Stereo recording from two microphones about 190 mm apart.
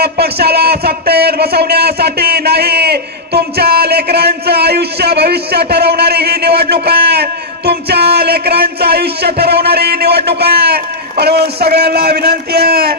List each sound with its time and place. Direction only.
0.0 s a man's voice: 55° right (ahead or behind)